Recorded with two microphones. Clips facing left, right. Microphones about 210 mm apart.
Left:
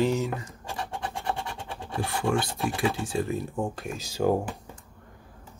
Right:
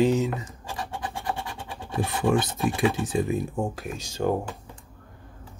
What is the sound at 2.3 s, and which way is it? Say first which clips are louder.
Speech: right 3 dB; 20° right (ahead or behind).